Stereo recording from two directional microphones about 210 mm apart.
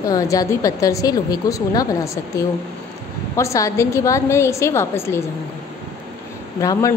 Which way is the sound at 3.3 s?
15° left (ahead or behind).